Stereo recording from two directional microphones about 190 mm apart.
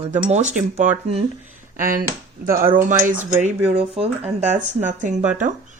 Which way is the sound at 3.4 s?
30° right (ahead or behind).